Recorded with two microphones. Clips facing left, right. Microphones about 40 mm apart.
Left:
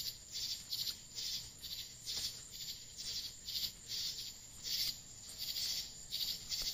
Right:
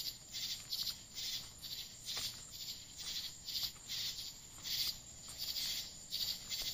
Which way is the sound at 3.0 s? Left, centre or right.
Right.